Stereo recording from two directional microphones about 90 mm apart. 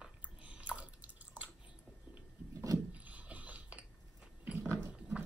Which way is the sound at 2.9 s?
15° right (ahead or behind).